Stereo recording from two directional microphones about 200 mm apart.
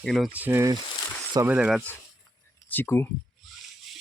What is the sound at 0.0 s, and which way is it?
Speech, centre (ahead or behind).